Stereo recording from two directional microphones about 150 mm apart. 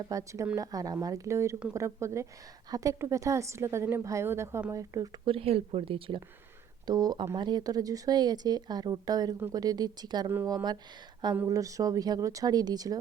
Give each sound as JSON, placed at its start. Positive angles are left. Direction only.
{"t": 0.0, "sound": "a woman's voice", "side_deg": -20}
{"t": 5.3, "sound": "a woman's voice", "side_deg": -40}